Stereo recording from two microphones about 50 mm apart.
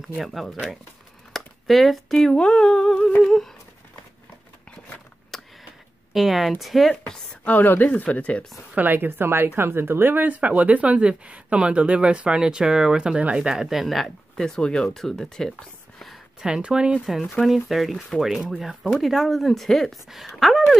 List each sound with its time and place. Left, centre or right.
0.1 s speech: centre
1.3 s a sound: centre
2.3 s speech: centre
5.3 s a sound: centre
6.1 s speech: centre
7.4 s speech: left
8.7 s speech: right; by 15.5 s centre
16.3 s speech: centre
17.0 s speech: centre